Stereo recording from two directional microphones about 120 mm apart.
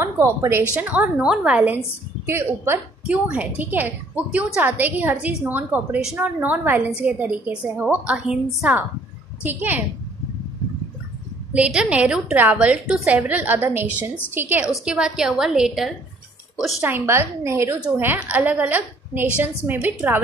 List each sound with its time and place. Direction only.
0.0 s a woman's voice: 25° right (ahead or behind)
0.7 s a woman's voice: 15° right (ahead or behind)
9.4 s a woman's voice: 15° right (ahead or behind)
11.5 s a woman's voice: 10° right (ahead or behind)
14.9 s a woman's voice: 5° right (ahead or behind)
16.8 s a woman's voice: 20° right (ahead or behind)